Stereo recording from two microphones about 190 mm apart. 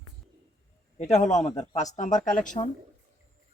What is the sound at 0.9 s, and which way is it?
Speech, 35° left (ahead or behind).